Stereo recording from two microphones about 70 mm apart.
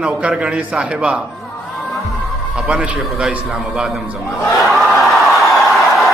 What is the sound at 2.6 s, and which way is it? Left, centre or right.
Speech, centre.